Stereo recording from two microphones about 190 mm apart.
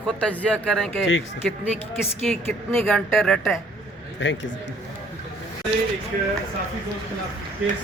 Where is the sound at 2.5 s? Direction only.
10° left (ahead or behind).